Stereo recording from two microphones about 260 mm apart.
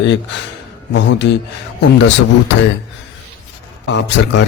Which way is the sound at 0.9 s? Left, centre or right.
Left.